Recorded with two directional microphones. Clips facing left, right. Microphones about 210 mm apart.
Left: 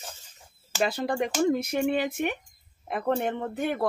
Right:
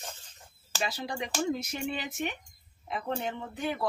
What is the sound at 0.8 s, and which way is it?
Speech, 55° left (ahead or behind).